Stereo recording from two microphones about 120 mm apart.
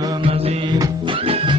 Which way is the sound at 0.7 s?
40° right (ahead or behind).